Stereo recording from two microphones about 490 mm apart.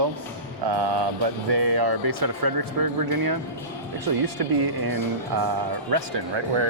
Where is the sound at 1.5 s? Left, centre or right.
Right.